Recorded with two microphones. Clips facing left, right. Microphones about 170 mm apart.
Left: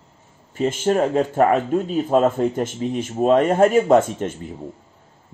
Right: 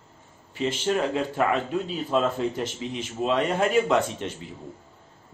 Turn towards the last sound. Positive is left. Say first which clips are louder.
# left 7 dB
turn(degrees=45)  # may be behind; listen again after turning